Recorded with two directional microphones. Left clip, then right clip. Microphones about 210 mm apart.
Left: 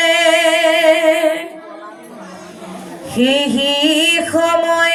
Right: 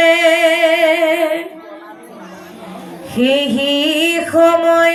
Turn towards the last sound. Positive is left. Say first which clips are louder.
# right 3 dB
turn(degrees=15)  # may be behind; listen again after turning